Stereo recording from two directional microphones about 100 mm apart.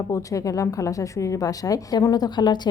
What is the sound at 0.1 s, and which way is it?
A woman's voice, 35° left (ahead or behind).